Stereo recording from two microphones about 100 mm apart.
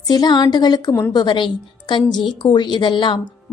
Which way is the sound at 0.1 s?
45° left (ahead or behind).